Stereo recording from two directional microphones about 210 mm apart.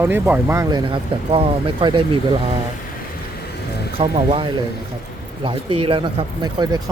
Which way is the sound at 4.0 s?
30° right (ahead or behind).